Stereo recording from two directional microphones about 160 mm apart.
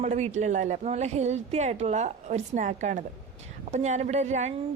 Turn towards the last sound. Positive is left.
turn(degrees=-45)  # may be behind; listen again after turning